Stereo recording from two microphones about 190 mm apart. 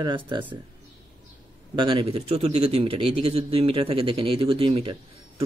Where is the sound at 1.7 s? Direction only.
25° right (ahead or behind).